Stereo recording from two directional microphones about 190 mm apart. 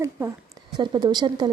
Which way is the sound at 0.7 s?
25° right (ahead or behind).